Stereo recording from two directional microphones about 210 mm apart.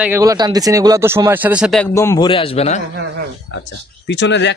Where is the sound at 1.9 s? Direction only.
15° left (ahead or behind).